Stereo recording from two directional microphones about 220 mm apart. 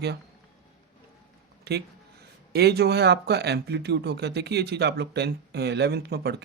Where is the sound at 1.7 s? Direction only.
45° right (ahead or behind).